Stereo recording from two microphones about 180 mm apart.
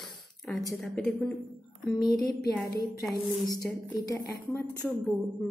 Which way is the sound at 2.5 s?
15° left (ahead or behind).